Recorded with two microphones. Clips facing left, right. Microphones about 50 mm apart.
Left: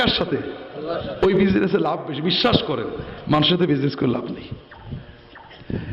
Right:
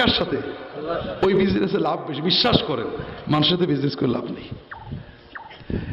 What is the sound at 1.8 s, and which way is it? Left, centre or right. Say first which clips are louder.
Speech: left 1 dB; centre.